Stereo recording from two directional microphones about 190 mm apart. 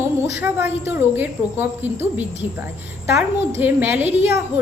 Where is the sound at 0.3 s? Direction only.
10° right (ahead or behind).